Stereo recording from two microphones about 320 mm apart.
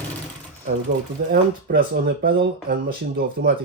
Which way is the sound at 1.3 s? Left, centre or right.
Right.